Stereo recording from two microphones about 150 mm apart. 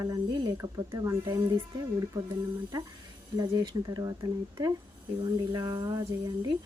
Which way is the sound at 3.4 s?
25° right (ahead or behind).